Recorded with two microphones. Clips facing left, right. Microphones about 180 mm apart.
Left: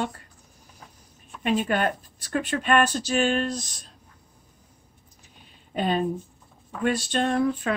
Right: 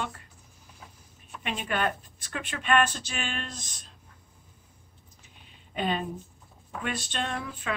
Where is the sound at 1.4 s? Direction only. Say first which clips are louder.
Left 6 dB; 40° left (ahead or behind).